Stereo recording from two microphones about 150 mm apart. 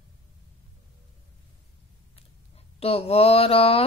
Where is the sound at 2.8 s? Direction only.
40° left (ahead or behind).